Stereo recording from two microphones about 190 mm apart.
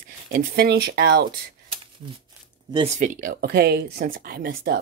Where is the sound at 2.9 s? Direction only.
45° right (ahead or behind).